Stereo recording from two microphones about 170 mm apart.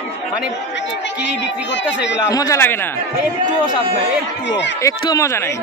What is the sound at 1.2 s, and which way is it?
Speech, 90° left.